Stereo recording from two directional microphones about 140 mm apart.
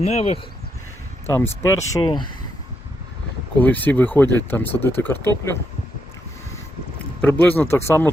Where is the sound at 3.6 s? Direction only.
10° left (ahead or behind).